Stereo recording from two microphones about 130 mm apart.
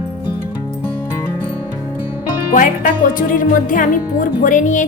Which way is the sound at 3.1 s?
90° left.